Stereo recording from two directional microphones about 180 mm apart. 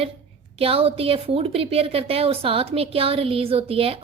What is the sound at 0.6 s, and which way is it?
A woman's voice, 30° right (ahead or behind).